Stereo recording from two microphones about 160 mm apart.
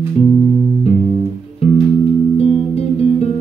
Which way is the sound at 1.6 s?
40° left (ahead or behind).